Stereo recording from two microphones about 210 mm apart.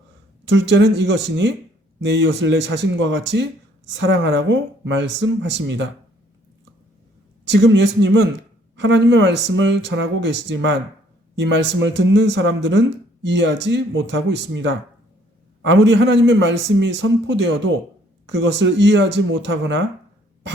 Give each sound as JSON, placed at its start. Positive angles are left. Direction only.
{"t": 0.4, "sound": "speech", "side_deg": -55}
{"t": 7.4, "sound": "speech", "side_deg": -55}